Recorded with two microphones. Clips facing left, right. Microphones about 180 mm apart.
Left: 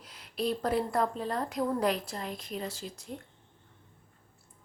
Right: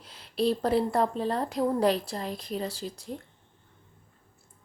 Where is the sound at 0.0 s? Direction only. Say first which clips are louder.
Right 6 dB; 30° right (ahead or behind).